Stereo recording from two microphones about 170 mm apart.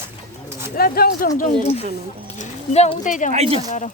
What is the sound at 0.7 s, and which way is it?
Speech, 60° left (ahead or behind).